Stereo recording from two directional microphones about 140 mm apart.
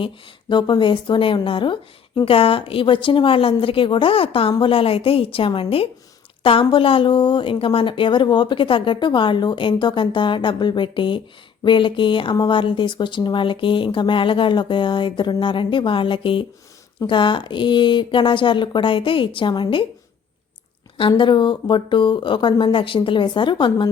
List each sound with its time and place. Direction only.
0.0 s speech: 35° left (ahead or behind)
21.1 s speech: 35° left (ahead or behind)